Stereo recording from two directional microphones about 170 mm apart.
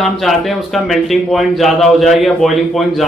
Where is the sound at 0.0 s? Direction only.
Centre (ahead or behind).